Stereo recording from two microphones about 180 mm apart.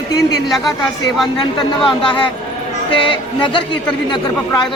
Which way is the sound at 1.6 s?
25° left (ahead or behind).